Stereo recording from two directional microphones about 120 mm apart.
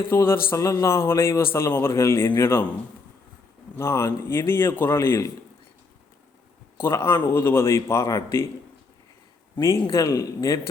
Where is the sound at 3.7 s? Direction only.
20° left (ahead or behind).